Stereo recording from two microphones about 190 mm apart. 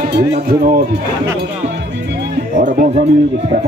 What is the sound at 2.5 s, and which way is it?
Speech, 40° right (ahead or behind).